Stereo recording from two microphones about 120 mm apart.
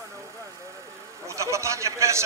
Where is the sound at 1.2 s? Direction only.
25° right (ahead or behind).